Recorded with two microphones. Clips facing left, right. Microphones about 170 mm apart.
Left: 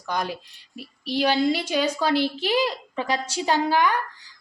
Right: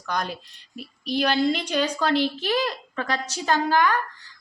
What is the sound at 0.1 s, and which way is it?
A woman's voice, 10° left (ahead or behind).